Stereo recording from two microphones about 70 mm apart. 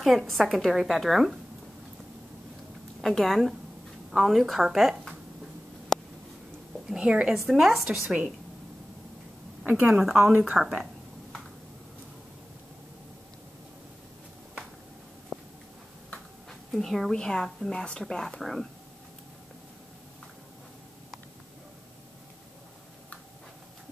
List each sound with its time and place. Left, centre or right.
0.0 s speech: centre
3.0 s speech: centre
5.9 s a sound: centre
6.9 s a woman's voice: centre
9.8 s a woman's voice: centre
15.3 s a sound: centre
16.7 s speech: centre